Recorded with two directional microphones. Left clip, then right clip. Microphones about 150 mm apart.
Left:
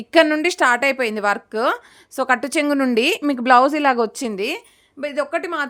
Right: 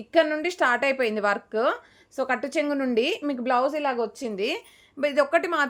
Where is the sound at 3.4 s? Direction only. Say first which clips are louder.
Left 10 dB; 80° left.